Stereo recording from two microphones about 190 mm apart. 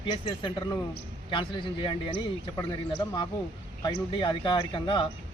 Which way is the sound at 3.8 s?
25° left (ahead or behind).